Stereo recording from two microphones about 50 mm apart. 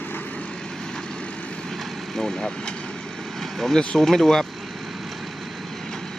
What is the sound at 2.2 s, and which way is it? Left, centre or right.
Speech, centre.